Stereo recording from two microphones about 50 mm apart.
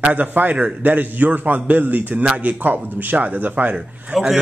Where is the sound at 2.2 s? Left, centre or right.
Right.